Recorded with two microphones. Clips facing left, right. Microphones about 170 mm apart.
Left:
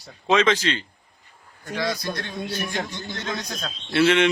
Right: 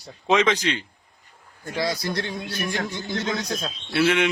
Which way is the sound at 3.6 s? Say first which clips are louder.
Left 4 dB; 10° right (ahead or behind).